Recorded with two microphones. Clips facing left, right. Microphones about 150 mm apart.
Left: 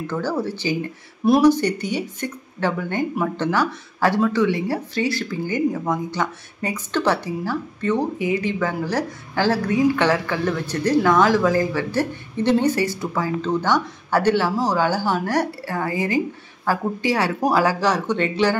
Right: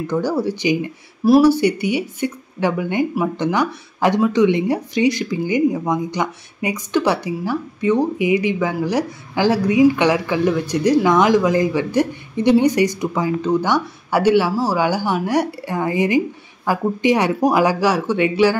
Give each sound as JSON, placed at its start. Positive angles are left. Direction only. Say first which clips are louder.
{"t": 0.0, "sound": "speech", "louder": "right 4 dB", "side_deg": -15}